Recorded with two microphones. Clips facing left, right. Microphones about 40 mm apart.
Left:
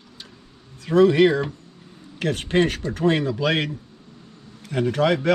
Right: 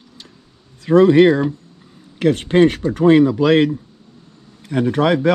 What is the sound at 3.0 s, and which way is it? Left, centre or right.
Speech, centre.